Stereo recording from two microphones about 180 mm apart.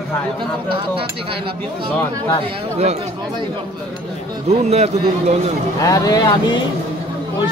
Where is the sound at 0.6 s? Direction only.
30° right (ahead or behind).